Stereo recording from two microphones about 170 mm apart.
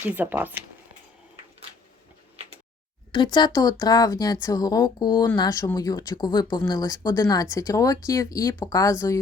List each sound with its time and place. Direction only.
0.0 s speech: 10° right (ahead or behind)
3.1 s speech: 25° left (ahead or behind)